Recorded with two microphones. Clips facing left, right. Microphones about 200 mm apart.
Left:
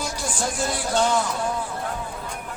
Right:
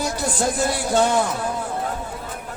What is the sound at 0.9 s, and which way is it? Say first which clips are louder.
Speech: right 3 dB; 55° right (ahead or behind).